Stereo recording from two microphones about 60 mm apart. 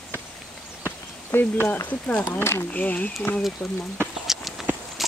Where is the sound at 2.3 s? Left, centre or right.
Left.